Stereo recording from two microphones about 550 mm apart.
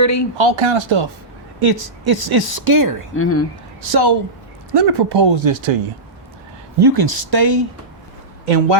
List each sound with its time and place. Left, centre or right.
0.0 s speech: left
0.3 s speech: right
1.5 s speech: right
3.2 s speech: left
3.9 s speech: right
6.7 s speech: right